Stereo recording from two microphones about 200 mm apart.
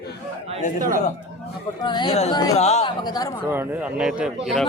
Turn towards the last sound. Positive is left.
turn(degrees=0)  # may be behind; listen again after turning